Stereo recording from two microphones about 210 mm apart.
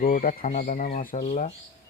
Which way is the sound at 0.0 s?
40° left (ahead or behind).